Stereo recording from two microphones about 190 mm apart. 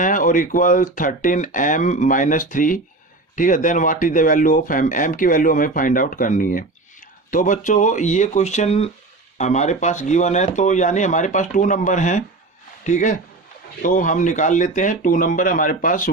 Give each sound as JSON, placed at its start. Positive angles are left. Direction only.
{"t": 0.0, "sound": "speech", "side_deg": 45}